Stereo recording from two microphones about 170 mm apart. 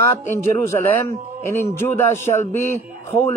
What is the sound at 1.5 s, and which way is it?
A man's voice, 15° left (ahead or behind).